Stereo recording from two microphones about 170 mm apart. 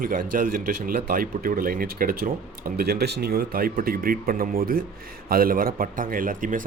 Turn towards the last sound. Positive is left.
turn(degrees=-50)  # may be behind; listen again after turning